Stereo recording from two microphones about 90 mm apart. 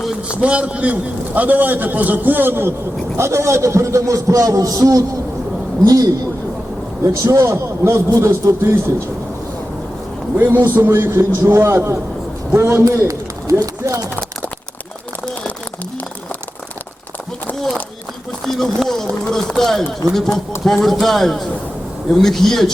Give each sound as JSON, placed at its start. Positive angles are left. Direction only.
{"t": 0.0, "sound": "a sound", "side_deg": -5}
{"t": 0.4, "sound": "a man's voice", "side_deg": -15}
{"t": 7.3, "sound": "a man's voice", "side_deg": -35}
{"t": 10.3, "sound": "a man's voice", "side_deg": -25}
{"t": 18.4, "sound": "speech", "side_deg": 5}